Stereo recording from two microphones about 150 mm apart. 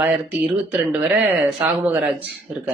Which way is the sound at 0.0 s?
10° right (ahead or behind).